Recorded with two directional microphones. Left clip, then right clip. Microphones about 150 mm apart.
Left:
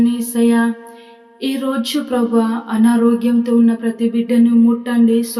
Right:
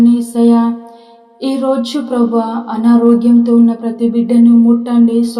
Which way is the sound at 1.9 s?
15° left (ahead or behind).